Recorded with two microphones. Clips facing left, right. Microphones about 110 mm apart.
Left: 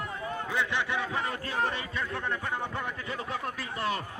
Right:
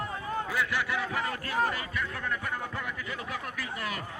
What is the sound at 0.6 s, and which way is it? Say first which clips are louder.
A man's voice: left 3 dB; 25° left (ahead or behind).